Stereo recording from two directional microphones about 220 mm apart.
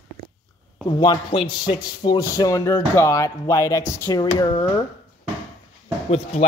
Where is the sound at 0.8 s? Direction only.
20° left (ahead or behind).